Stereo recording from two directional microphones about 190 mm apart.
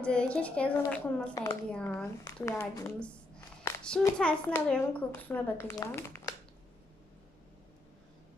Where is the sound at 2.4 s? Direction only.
15° left (ahead or behind).